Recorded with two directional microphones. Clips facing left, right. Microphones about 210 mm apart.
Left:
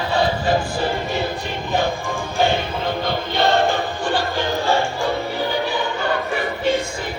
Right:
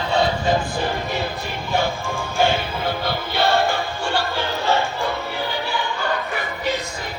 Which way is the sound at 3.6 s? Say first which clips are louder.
Left 3 dB; 15° left (ahead or behind).